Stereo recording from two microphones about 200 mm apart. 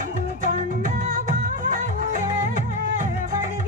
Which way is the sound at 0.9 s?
40° right (ahead or behind).